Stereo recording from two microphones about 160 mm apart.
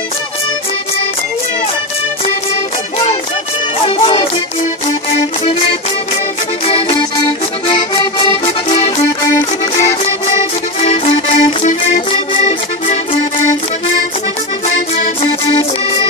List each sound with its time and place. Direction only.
3.8 s music: 35° left (ahead or behind)
5.4 s music: 40° left (ahead or behind)
7.6 s accordion: 35° left (ahead or behind)
9.8 s music: 45° left (ahead or behind)